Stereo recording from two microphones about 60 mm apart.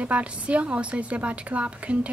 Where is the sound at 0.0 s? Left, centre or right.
Right.